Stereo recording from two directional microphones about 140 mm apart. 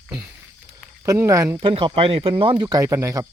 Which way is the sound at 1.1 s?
25° right (ahead or behind).